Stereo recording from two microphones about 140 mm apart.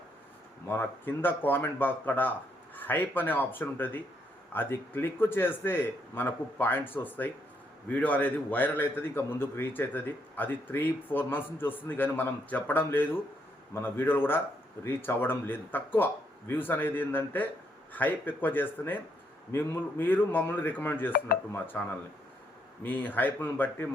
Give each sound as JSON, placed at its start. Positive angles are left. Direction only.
{"t": 0.7, "sound": "a man's voice", "side_deg": 15}